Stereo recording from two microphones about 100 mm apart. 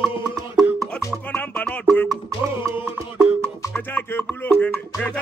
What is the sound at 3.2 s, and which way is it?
Music, 10° left (ahead or behind).